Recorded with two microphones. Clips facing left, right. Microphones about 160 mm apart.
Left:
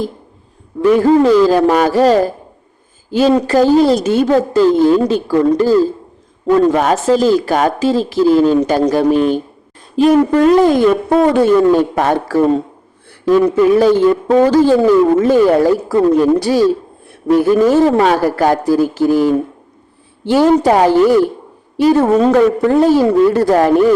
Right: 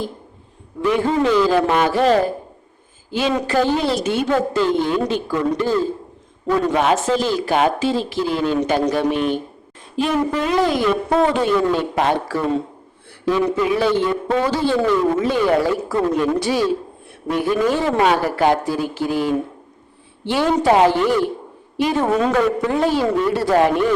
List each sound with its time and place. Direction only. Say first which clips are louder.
0.9 s speech: left 8 dB; 40° left (ahead or behind)